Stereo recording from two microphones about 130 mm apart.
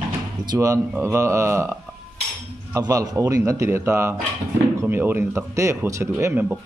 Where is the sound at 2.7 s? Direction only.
30° right (ahead or behind).